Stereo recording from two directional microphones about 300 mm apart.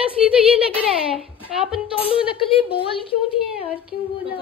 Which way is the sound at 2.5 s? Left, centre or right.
Centre.